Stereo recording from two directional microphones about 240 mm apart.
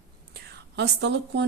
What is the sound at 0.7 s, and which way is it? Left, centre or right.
Speech, right.